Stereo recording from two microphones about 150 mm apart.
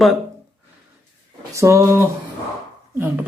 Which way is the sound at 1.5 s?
20° right (ahead or behind).